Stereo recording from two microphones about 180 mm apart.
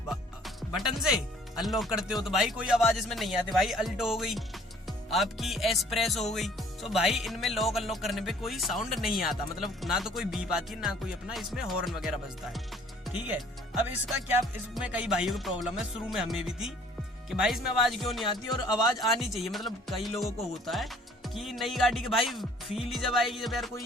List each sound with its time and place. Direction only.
0.1 s music: centre (ahead or behind)
1.1 s speech: centre (ahead or behind)
14.8 s speech: 5° right (ahead or behind)
18.3 s speech: 25° left (ahead or behind)
18.9 s speech: centre (ahead or behind)